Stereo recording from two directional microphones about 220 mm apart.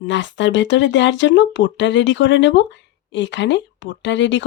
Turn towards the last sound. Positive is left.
turn(degrees=55)  # may be behind; listen again after turning